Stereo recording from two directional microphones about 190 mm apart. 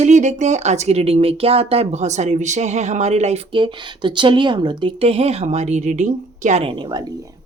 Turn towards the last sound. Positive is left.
turn(degrees=-25)  # may be behind; listen again after turning